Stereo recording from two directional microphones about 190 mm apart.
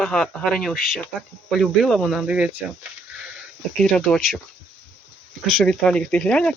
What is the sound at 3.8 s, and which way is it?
Speech, 5° left (ahead or behind).